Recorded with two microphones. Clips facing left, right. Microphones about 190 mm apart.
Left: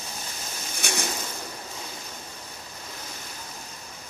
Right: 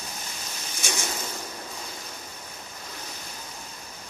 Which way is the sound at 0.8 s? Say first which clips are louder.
Left 1 dB; 60° left (ahead or behind).